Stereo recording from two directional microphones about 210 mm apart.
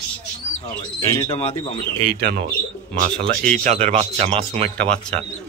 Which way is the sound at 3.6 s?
30° right (ahead or behind).